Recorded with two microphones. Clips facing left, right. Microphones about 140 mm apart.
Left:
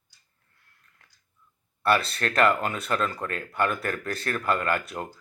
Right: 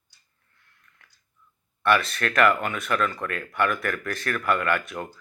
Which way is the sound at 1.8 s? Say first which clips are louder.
Right 1 dB; 35° left (ahead or behind).